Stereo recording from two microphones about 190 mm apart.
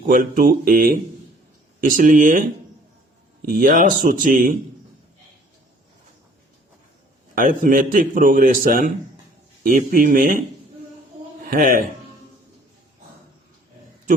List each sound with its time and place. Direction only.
0.1 s a man's voice: 45° right (ahead or behind)
7.3 s a man's voice: 45° right (ahead or behind)
11.4 s speech: 45° right (ahead or behind)